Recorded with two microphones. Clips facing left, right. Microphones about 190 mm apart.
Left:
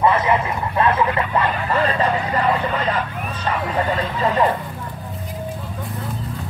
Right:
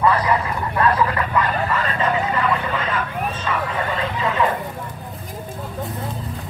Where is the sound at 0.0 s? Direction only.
20° left (ahead or behind).